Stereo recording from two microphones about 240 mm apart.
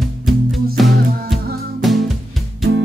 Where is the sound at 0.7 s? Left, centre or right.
Centre.